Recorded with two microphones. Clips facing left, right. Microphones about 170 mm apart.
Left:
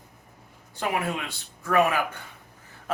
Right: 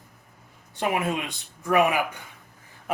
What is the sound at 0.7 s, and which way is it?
Speech, 20° right (ahead or behind).